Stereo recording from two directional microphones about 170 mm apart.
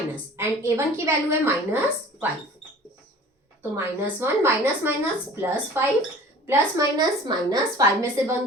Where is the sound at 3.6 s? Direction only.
15° right (ahead or behind).